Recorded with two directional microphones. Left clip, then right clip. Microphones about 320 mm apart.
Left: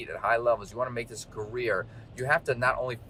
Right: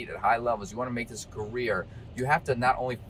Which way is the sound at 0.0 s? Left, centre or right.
Centre.